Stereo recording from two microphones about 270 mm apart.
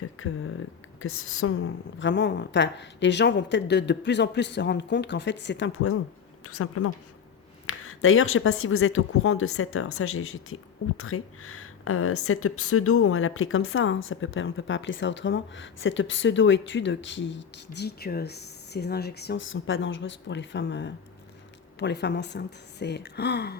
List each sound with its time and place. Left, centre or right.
0.2 s a woman's voice: left